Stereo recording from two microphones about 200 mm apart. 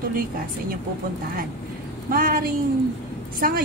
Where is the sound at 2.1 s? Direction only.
45° right (ahead or behind).